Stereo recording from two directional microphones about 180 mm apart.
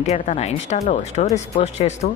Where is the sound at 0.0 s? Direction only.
35° left (ahead or behind).